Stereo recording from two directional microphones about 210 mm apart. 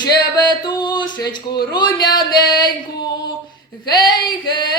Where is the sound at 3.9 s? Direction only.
20° left (ahead or behind).